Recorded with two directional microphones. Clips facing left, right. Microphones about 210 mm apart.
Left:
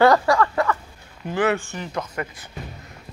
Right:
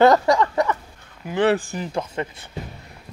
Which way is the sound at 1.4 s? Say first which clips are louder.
Right 3 dB; 35° right (ahead or behind).